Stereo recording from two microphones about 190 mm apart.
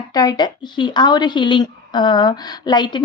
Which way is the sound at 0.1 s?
20° left (ahead or behind).